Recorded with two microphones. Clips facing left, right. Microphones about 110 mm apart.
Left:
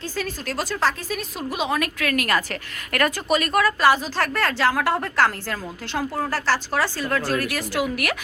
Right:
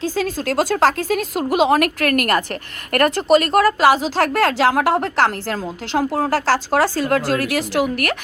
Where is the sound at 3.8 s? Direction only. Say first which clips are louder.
Right 4 dB; 85° right.